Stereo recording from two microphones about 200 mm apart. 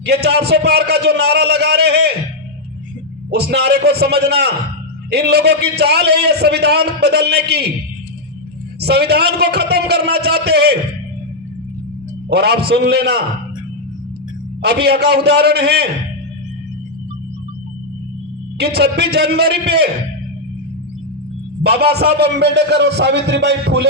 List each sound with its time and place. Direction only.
0.0 s a man's voice: 55° right (ahead or behind)
3.2 s a man's voice: 55° right (ahead or behind)
8.8 s a man's voice: 55° right (ahead or behind)
12.3 s a man's voice: 55° right (ahead or behind)
14.6 s a man's voice: 55° right (ahead or behind)
18.5 s a man's voice: 55° right (ahead or behind)
21.6 s a man's voice: 55° right (ahead or behind)